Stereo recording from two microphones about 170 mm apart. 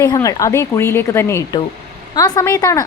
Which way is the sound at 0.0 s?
20° left (ahead or behind).